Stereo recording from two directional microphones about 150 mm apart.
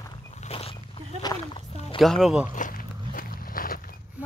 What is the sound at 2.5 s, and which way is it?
Walk, 65° left (ahead or behind).